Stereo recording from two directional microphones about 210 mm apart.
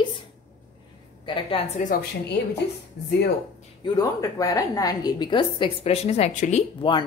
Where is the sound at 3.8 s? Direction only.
15° left (ahead or behind).